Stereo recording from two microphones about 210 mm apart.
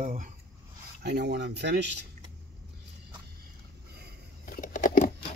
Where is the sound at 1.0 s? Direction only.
55° right (ahead or behind).